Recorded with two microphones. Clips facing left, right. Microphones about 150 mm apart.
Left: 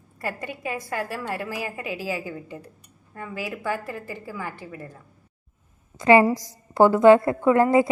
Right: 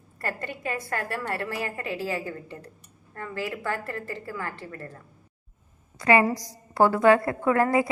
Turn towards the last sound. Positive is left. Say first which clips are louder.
# left 4 dB
turn(degrees=25)  # may be behind; listen again after turning